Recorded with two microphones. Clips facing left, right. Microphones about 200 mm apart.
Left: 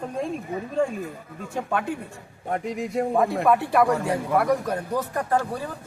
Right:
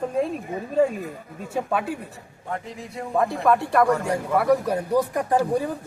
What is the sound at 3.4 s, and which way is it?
A man's voice, 5° left (ahead or behind).